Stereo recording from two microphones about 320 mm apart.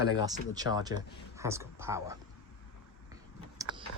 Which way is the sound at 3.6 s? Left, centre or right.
Centre.